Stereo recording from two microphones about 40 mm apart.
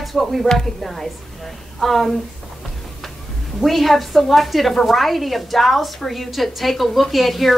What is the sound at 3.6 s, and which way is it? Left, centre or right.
A woman's voice, centre.